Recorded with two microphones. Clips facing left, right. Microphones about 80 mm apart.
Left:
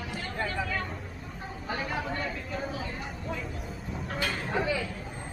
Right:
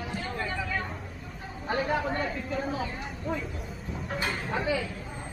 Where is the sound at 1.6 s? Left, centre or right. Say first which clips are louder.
Right 5 dB; right.